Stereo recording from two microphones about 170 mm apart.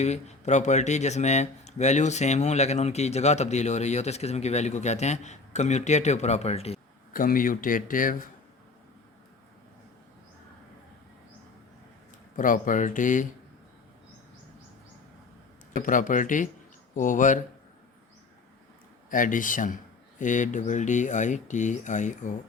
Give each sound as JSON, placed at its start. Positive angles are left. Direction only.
{"t": 0.0, "sound": "speech", "side_deg": 40}
{"t": 7.1, "sound": "speech", "side_deg": 55}
{"t": 12.4, "sound": "speech", "side_deg": 50}
{"t": 15.7, "sound": "speech", "side_deg": 50}
{"t": 19.1, "sound": "speech", "side_deg": 50}